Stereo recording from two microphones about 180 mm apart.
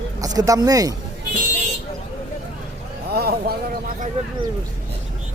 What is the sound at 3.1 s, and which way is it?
Speech, 60° right (ahead or behind).